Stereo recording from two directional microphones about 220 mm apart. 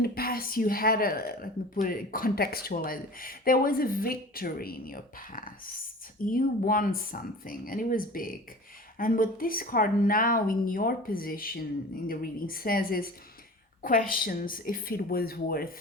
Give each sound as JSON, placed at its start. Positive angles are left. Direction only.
{"t": 0.0, "sound": "speech", "side_deg": 40}